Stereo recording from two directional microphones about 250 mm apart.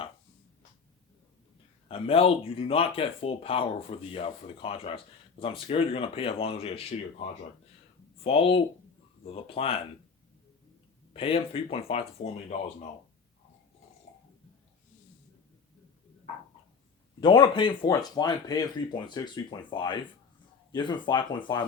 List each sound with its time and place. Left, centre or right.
1.9 s speech: left
8.2 s speech: left
11.1 s speech: left
17.2 s speech: centre